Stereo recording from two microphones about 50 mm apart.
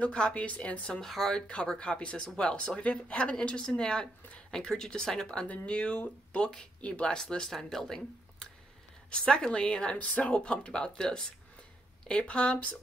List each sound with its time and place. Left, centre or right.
0.0 s speech: left
1.0 s speech: centre
1.5 s speech: left
7.2 s speech: centre